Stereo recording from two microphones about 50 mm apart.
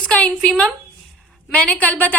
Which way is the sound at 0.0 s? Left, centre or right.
Left.